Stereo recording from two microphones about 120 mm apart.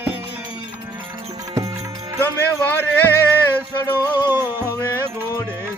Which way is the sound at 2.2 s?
15° left (ahead or behind).